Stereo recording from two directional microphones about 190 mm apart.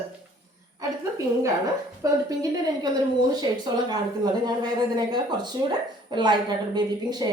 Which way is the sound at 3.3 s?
20° right (ahead or behind).